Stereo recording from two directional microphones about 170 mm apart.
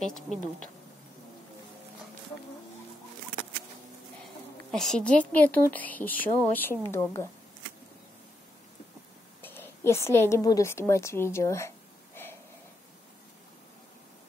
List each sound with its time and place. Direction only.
0.0 s speech: 5° left (ahead or behind)
4.2 s speech: centre (ahead or behind)
9.4 s a woman's voice: 15° left (ahead or behind)